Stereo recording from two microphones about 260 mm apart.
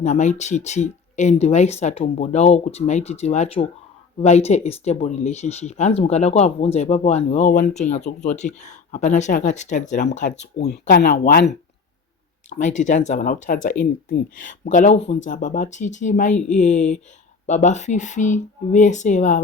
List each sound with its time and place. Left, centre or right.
0.0 s speech: left
12.5 s speech: left